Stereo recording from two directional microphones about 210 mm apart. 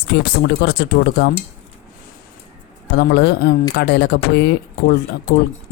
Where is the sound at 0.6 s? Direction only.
50° left (ahead or behind).